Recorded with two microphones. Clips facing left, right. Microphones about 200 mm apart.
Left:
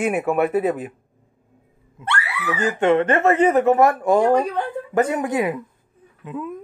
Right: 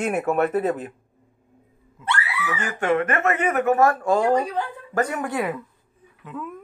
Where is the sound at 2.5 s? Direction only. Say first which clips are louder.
Left 5 dB; 25° left (ahead or behind).